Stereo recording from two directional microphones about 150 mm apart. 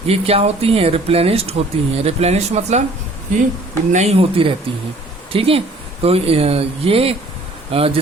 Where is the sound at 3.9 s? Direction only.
45° right (ahead or behind).